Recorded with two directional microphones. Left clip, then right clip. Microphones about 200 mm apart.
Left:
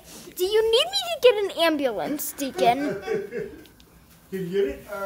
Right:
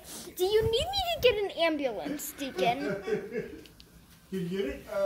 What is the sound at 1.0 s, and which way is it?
A child's voice, 20° left (ahead or behind).